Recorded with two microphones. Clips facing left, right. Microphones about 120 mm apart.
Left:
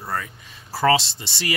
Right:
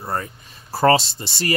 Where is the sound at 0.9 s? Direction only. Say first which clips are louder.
Right 3 dB; 45° right (ahead or behind).